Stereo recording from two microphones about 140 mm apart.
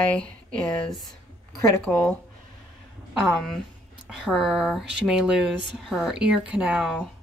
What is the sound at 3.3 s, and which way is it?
Speech, 5° left (ahead or behind).